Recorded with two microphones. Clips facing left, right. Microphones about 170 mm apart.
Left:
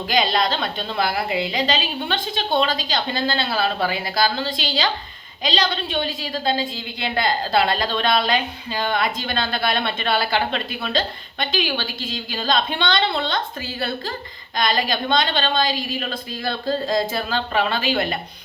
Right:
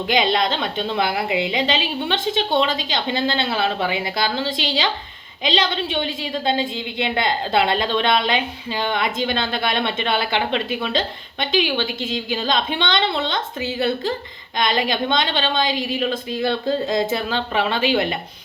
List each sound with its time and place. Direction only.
0.1 s a woman's voice: 20° right (ahead or behind)